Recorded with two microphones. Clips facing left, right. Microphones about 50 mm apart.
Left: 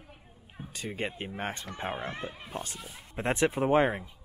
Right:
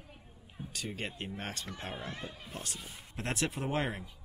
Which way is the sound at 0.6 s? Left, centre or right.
Left.